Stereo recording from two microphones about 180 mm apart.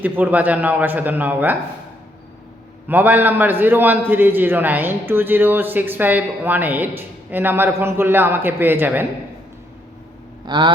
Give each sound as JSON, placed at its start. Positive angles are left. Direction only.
{"t": 0.0, "sound": "a man's voice", "side_deg": -10}
{"t": 2.8, "sound": "a man's voice", "side_deg": -10}
{"t": 10.4, "sound": "vehicle", "side_deg": -25}